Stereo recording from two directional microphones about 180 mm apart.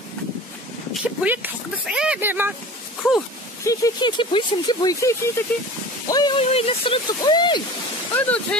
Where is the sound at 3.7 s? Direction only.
20° left (ahead or behind).